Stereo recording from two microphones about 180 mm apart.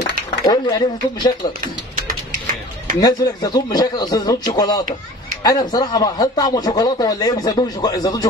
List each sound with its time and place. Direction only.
0.5 s speech: 25° left (ahead or behind)
3.0 s speech: 20° left (ahead or behind)